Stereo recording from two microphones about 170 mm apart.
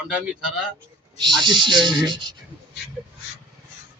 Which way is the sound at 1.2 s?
25° right (ahead or behind).